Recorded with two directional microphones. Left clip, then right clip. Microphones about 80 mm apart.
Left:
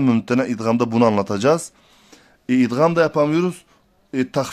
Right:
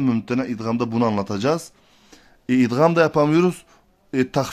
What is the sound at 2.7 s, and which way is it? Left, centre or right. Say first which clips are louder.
Speech: even; centre.